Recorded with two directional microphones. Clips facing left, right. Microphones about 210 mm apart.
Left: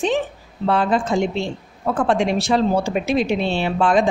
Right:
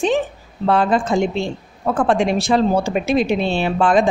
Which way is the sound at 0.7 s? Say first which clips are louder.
Right 2 dB; 45° right (ahead or behind).